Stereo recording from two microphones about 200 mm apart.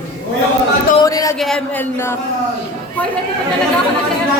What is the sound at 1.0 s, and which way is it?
Speech, 15° left (ahead or behind).